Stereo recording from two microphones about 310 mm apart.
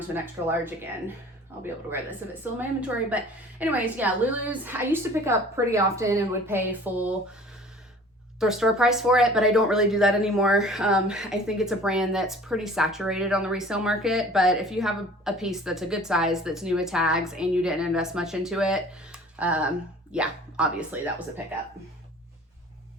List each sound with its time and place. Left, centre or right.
0.1 s a woman's voice: centre
8.4 s speech: centre